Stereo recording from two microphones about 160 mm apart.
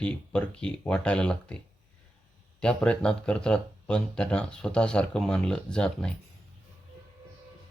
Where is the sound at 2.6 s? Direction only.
5° left (ahead or behind).